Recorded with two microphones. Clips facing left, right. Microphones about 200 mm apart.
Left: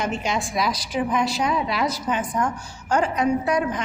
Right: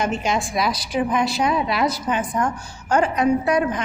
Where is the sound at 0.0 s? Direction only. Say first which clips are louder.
Right 3 dB; 50° right (ahead or behind).